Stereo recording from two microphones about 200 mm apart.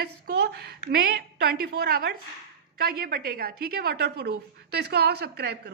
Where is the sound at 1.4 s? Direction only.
50° right (ahead or behind).